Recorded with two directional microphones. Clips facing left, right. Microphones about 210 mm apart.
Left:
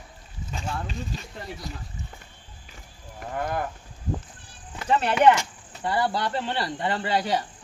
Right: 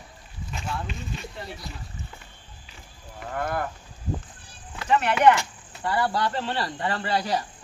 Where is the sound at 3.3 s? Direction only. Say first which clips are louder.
Even; 15° left (ahead or behind).